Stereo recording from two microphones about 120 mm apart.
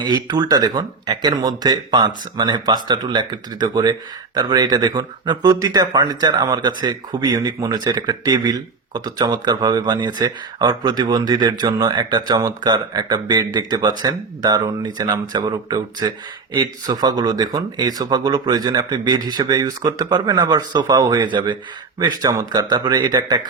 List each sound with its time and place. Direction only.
0.0 s speech: 35° right (ahead or behind)